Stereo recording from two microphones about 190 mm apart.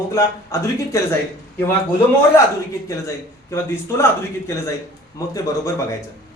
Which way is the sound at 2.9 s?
15° left (ahead or behind).